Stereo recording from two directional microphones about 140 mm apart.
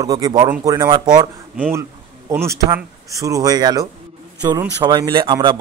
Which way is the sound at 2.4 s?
20° right (ahead or behind).